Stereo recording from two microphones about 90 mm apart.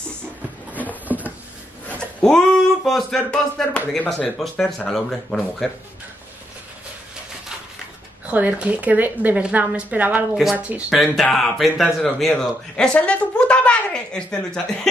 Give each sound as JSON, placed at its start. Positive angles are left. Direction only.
{"t": 1.0, "sound": "a sound", "side_deg": -20}
{"t": 1.9, "sound": "a sound", "side_deg": 10}
{"t": 3.3, "sound": "speech", "side_deg": 15}
{"t": 4.4, "sound": "a man's voice", "side_deg": 5}
{"t": 8.3, "sound": "a woman's voice", "side_deg": -15}
{"t": 11.3, "sound": "a man's voice", "side_deg": 0}